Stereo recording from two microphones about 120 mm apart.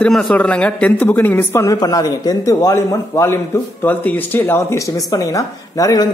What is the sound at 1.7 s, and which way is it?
A man's voice, 35° left (ahead or behind).